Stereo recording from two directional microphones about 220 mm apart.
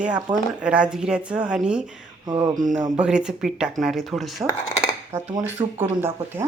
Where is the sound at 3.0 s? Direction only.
5° right (ahead or behind).